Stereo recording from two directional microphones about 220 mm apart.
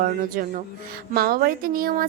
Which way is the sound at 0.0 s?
40° right (ahead or behind).